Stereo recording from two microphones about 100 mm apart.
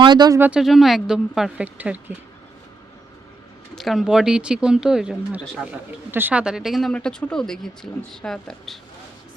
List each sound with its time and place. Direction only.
0.0 s speech: 45° right (ahead or behind)
0.5 s speech: 5° right (ahead or behind)
1.6 s speech: 15° right (ahead or behind)
3.8 s speech: centre (ahead or behind)
6.1 s a woman's voice: 20° right (ahead or behind)
6.4 s speech: 5° right (ahead or behind)
6.9 s speech: 10° left (ahead or behind)